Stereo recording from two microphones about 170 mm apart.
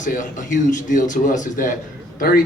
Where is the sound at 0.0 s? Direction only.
50° left (ahead or behind).